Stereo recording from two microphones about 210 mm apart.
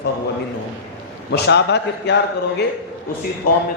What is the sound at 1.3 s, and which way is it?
Speech, 55° left (ahead or behind).